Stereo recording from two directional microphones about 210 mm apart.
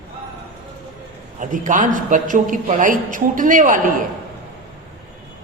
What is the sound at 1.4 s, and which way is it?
A woman's voice, 40° right (ahead or behind).